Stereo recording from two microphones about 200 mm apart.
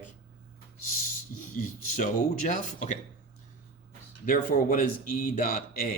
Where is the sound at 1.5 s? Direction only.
40° left (ahead or behind).